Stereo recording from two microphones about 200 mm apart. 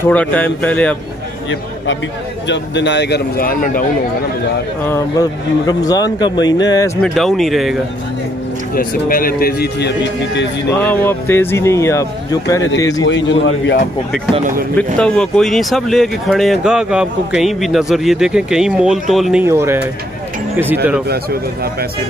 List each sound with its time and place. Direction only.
0.0 s speech: 5° left (ahead or behind)
2.4 s speech: 65° left (ahead or behind); by 3.8 s 45° left (ahead or behind)
4.8 s speech: 15° left (ahead or behind)
7.0 s speech: centre (ahead or behind)
8.7 s speech: 45° left (ahead or behind); by 10.5 s 60° left (ahead or behind)
10.7 s speech: 10° left (ahead or behind)
13.0 s a man's voice: 70° left (ahead or behind)
15.0 s speech: 5° left (ahead or behind)
19.4 s speech: 10° right (ahead or behind)